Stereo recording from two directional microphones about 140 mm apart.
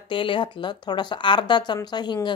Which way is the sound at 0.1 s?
35° left (ahead or behind).